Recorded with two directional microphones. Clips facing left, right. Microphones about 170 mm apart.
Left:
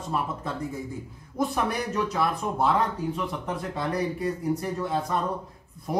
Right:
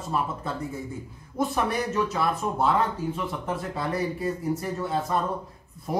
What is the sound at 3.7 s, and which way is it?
Speech, 5° right (ahead or behind).